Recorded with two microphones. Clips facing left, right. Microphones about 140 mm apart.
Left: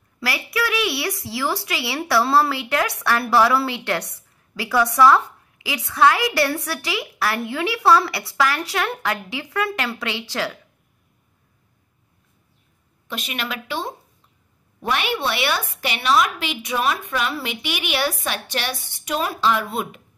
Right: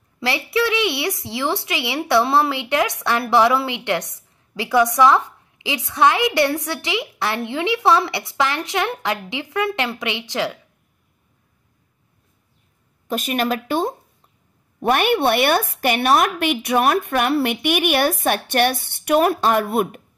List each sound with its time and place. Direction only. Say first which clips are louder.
0.2 s a woman's voice: right 4 dB; 25° right (ahead or behind)
13.1 s a woman's voice: right 8 dB; 45° right (ahead or behind)